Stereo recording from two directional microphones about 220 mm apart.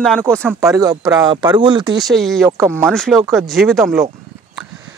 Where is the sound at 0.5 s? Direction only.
15° right (ahead or behind).